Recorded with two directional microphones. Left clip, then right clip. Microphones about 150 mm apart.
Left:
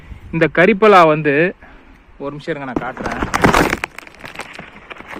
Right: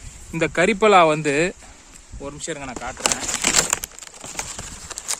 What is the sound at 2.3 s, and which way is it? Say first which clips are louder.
Speech: left 6 dB; 55° left (ahead or behind).